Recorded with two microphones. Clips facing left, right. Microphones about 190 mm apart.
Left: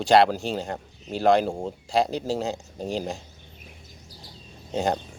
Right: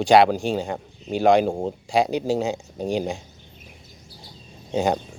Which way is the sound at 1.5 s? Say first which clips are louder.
Right 4 dB; 40° right (ahead or behind).